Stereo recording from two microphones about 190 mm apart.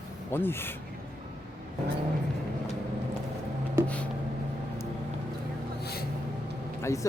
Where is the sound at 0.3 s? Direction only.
10° left (ahead or behind).